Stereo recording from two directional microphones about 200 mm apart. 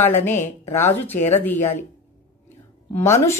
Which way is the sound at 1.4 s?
10° left (ahead or behind).